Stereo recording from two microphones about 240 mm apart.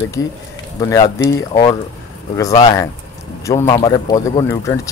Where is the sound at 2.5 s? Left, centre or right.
Centre.